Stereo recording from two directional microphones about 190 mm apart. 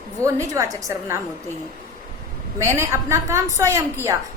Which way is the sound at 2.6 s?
15° right (ahead or behind).